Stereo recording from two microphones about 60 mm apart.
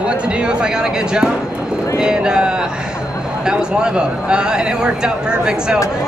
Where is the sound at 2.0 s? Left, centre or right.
Centre.